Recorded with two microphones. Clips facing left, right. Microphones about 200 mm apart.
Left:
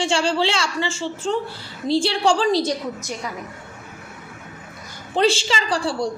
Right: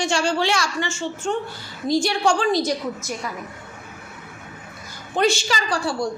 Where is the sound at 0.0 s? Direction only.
30° left (ahead or behind).